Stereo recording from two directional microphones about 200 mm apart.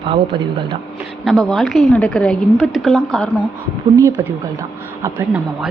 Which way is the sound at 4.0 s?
15° right (ahead or behind).